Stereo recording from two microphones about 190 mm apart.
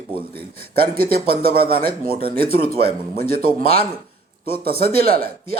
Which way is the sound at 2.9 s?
30° left (ahead or behind).